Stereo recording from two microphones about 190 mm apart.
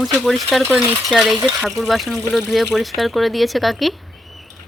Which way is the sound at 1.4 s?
15° right (ahead or behind).